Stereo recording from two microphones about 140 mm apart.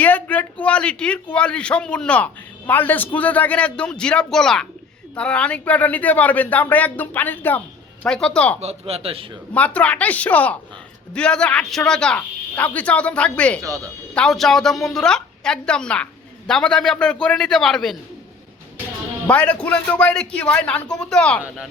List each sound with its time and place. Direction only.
0.0 s a man's voice: 10° left (ahead or behind)
8.6 s speech: 45° right (ahead or behind)
9.5 s a man's voice: 10° left (ahead or behind)
13.6 s speech: 25° right (ahead or behind)
14.1 s a woman's voice: 5° left (ahead or behind)
19.3 s a man's voice: 10° left (ahead or behind)